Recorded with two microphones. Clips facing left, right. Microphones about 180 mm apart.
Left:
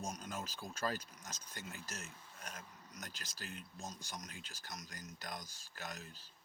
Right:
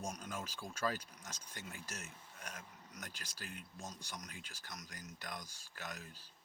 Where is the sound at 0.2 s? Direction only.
40° left (ahead or behind).